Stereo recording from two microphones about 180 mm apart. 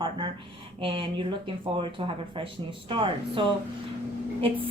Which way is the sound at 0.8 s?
30° right (ahead or behind).